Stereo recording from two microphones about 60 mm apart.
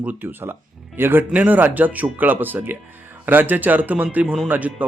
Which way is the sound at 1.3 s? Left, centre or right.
Right.